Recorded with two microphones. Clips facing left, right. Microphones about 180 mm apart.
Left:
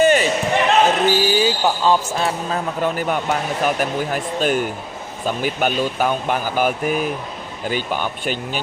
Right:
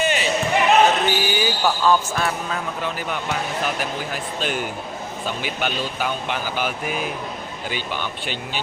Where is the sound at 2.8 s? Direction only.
45° left (ahead or behind).